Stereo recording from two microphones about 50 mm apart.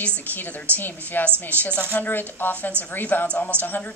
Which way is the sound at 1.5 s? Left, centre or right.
Right.